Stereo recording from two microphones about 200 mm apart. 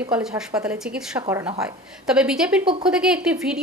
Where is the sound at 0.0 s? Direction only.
5° right (ahead or behind).